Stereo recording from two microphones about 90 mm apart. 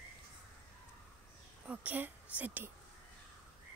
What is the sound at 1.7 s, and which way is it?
Speech, 20° right (ahead or behind).